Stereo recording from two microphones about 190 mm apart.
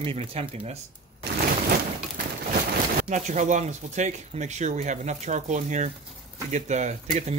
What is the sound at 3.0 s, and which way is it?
Speech, 40° right (ahead or behind).